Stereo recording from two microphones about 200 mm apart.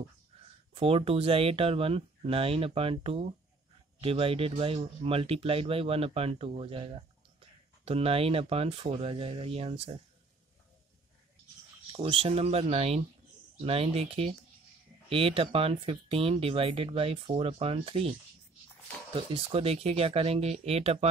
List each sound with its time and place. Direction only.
0.7 s speech: 30° right (ahead or behind)
11.9 s speech: 25° right (ahead or behind)
19.1 s speech: 25° right (ahead or behind)